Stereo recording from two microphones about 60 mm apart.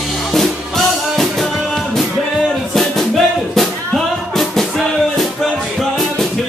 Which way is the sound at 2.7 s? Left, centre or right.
Centre.